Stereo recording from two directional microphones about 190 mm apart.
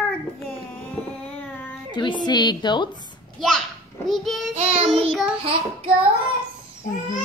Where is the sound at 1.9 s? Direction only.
25° left (ahead or behind).